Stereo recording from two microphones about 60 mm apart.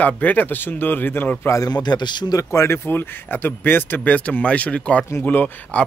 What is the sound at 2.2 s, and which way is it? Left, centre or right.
Speech, left.